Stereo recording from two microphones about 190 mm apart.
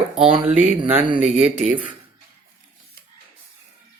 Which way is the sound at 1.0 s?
25° right (ahead or behind).